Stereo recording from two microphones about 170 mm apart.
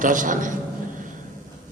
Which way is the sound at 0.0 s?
50° right (ahead or behind).